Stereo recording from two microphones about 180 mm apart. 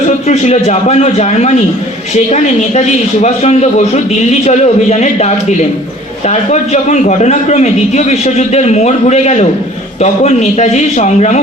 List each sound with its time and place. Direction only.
0.3 s a man's voice: 40° left (ahead or behind)